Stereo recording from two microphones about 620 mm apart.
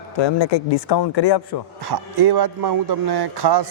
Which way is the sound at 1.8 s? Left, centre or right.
Right.